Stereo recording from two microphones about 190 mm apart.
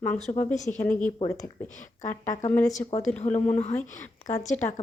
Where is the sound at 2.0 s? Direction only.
40° left (ahead or behind).